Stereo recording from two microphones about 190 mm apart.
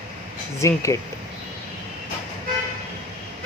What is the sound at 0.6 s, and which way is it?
Speech, 15° left (ahead or behind).